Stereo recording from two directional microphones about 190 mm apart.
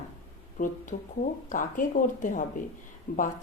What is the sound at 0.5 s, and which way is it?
Speech, 45° left (ahead or behind).